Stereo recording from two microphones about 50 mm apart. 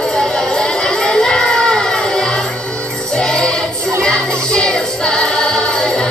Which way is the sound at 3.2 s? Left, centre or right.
Centre.